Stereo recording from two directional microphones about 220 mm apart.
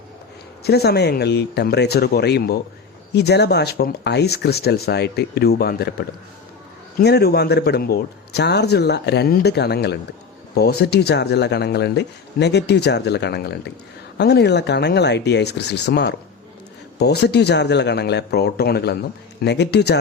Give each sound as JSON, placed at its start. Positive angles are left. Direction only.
{"t": 0.6, "sound": "speech", "side_deg": 45}